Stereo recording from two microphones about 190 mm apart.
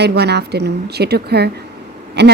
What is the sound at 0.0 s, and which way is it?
A woman's voice, 60° right (ahead or behind).